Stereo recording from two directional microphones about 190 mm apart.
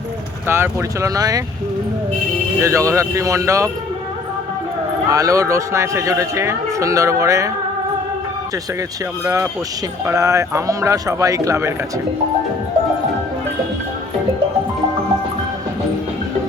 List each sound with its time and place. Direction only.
0.4 s a man's voice: 10° right (ahead or behind)
2.6 s a man's voice: 15° right (ahead or behind)
5.0 s a man's voice: 15° right (ahead or behind)
9.2 s a man's voice: 15° right (ahead or behind)